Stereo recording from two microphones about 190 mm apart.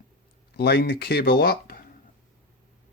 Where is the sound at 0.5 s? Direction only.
60° left (ahead or behind).